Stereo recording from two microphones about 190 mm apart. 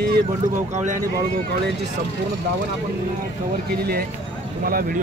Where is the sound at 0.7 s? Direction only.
40° right (ahead or behind).